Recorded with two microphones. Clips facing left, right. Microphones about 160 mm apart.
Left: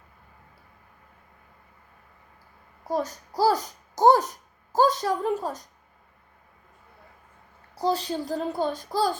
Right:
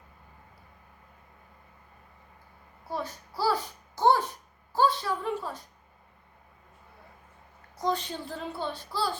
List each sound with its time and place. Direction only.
2.8 s a child's voice: 40° left (ahead or behind)
7.8 s a child's voice: 35° left (ahead or behind)